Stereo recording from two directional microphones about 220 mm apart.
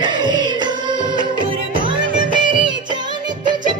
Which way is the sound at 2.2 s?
20° right (ahead or behind).